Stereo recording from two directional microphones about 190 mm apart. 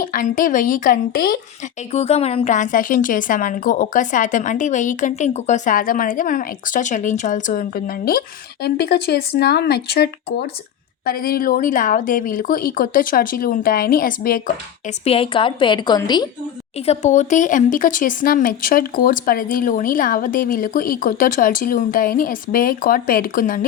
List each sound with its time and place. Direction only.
0.0 s speech: 45° left (ahead or behind)
1.9 s speech: 35° left (ahead or behind)
15.0 s a woman's voice: 30° left (ahead or behind)
16.8 s speech: 35° left (ahead or behind)